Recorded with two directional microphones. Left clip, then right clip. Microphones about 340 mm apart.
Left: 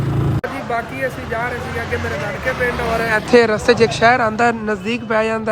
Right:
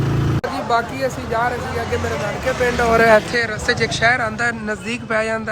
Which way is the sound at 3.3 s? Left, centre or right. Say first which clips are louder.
Left 7 dB; centre.